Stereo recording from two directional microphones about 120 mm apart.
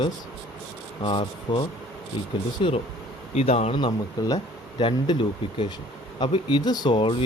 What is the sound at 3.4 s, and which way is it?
Speech, 60° left (ahead or behind).